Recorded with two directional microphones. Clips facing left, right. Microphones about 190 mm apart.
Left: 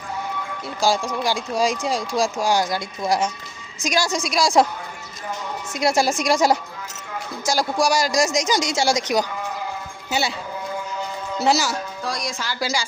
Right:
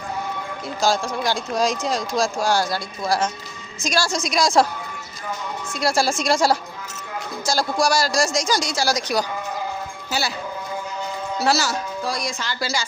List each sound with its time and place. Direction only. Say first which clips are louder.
0.8 s speech: even; 15° left (ahead or behind)
4.2 s a woman's voice: even; 5° left (ahead or behind)
5.7 s a woman's voice: left 1 dB; 20° left (ahead or behind)
11.3 s a woman's voice: left 1 dB; 20° left (ahead or behind)
12.0 s a woman's voice: right 1 dB; centre (ahead or behind)
12.4 s speech: left 1 dB; 10° left (ahead or behind)